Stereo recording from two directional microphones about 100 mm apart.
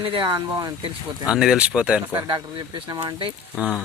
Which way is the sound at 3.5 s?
15° left (ahead or behind).